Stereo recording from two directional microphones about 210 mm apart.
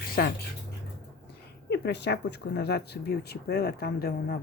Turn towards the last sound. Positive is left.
turn(degrees=45)  # may be behind; listen again after turning